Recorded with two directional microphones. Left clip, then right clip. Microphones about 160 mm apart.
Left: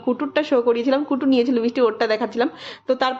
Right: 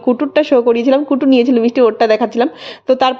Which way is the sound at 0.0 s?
30° right (ahead or behind).